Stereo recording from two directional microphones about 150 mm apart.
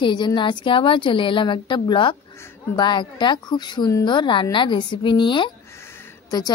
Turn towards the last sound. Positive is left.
turn(degrees=25)  # may be behind; listen again after turning